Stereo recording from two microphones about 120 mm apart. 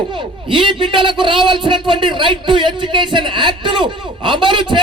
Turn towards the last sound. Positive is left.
turn(degrees=-40)  # may be behind; listen again after turning